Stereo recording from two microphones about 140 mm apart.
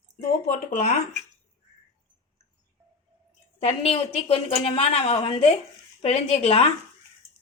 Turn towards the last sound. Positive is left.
turn(degrees=45)  # may be behind; listen again after turning